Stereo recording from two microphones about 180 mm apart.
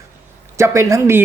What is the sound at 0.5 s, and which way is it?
Speech, 15° right (ahead or behind).